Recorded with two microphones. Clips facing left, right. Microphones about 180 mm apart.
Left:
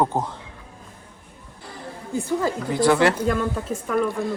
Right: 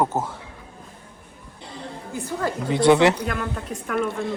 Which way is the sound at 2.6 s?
20° right (ahead or behind).